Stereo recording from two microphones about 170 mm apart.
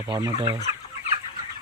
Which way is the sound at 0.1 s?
20° right (ahead or behind).